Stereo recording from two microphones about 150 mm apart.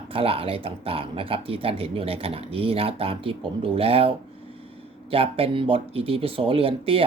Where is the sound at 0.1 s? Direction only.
40° right (ahead or behind).